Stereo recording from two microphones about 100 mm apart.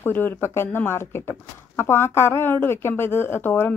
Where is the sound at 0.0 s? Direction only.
20° left (ahead or behind).